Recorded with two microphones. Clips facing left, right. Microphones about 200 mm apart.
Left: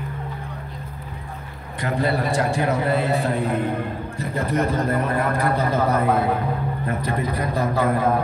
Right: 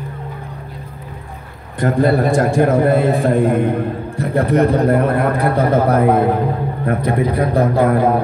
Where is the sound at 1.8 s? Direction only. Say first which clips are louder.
Right 8 dB; 50° right (ahead or behind).